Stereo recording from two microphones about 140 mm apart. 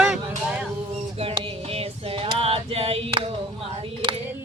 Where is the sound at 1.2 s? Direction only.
45° right (ahead or behind).